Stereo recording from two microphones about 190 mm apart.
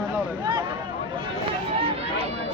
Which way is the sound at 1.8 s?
30° right (ahead or behind).